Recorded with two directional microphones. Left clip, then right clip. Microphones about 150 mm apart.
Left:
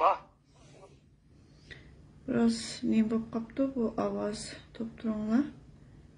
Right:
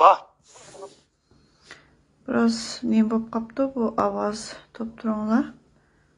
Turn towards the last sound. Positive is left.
turn(degrees=5)  # may be behind; listen again after turning